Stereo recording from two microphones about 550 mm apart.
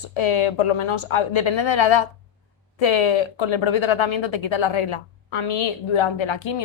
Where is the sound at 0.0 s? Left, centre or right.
Left.